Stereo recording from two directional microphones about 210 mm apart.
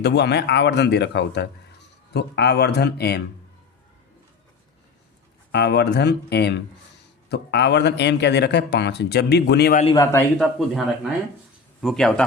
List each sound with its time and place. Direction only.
0.0 s speech: 50° left (ahead or behind)
5.5 s speech: 50° left (ahead or behind)
9.8 s a man's voice: 20° left (ahead or behind)
10.3 s speech: centre (ahead or behind)